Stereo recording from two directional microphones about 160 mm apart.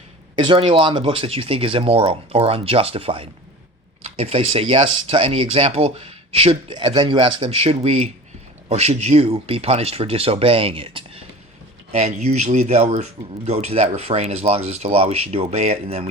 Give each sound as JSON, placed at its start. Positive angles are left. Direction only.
{"t": 0.3, "sound": "speech", "side_deg": -30}